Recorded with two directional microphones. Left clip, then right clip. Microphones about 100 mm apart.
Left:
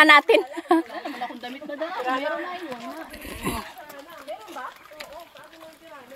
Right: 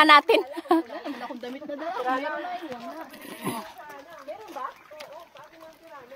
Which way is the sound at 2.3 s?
15° left (ahead or behind).